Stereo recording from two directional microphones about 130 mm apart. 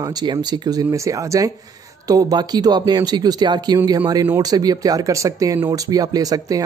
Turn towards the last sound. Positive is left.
turn(degrees=-30)  # may be behind; listen again after turning